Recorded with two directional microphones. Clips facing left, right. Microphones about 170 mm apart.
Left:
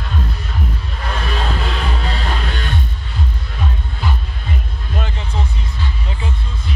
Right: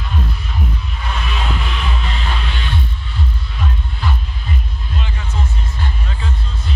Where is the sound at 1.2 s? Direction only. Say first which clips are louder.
Left 3 dB; 40° left (ahead or behind).